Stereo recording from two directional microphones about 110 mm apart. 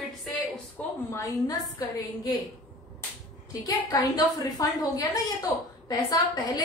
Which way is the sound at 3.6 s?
35° left (ahead or behind).